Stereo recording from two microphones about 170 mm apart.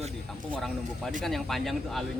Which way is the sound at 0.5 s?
Centre (ahead or behind).